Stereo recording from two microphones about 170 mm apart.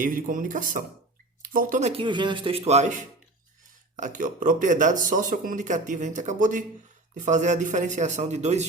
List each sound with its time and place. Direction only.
0.0 s speech: 50° right (ahead or behind)
1.9 s speech: 30° right (ahead or behind)